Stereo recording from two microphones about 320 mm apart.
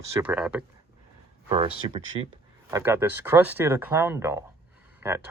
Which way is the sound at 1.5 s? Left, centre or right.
Centre.